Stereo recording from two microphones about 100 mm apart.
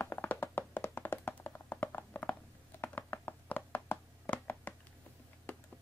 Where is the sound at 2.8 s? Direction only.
20° left (ahead or behind).